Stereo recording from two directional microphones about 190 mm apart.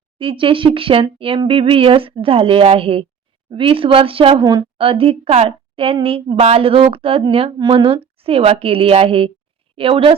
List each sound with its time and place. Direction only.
0.2 s a woman's voice: 25° right (ahead or behind)